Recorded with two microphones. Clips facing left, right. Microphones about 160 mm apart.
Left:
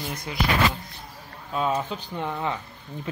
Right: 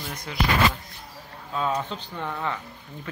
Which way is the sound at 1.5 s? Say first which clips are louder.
Left 1 dB; 15° left (ahead or behind).